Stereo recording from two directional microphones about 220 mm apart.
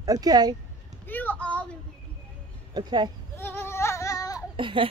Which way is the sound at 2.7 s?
20° right (ahead or behind).